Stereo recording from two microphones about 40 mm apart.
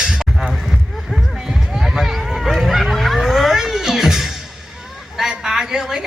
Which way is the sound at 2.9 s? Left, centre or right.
Centre.